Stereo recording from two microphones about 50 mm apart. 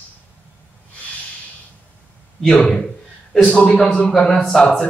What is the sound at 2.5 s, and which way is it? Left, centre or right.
A man's voice, centre.